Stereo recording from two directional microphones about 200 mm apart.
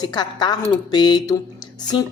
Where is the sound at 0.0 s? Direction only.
20° left (ahead or behind).